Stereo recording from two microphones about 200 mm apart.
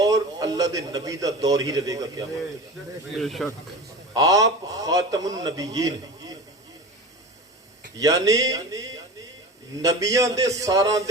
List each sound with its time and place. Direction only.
0.0 s a man's voice: 20° right (ahead or behind)
3.2 s speech: centre (ahead or behind)
4.1 s a man's voice: 15° right (ahead or behind)
7.9 s a man's voice: 15° right (ahead or behind)